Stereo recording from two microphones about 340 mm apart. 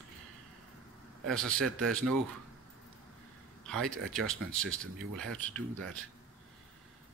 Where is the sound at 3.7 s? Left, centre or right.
Centre.